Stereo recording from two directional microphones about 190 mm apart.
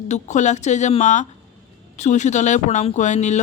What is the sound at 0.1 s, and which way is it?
Speech, 40° left (ahead or behind).